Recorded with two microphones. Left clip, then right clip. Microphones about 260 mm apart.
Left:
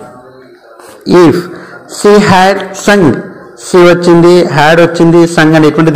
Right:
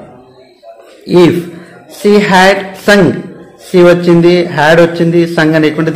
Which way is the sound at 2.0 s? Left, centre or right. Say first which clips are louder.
Left 2 dB; left.